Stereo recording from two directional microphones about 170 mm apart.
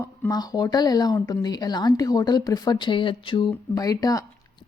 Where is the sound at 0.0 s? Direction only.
20° left (ahead or behind).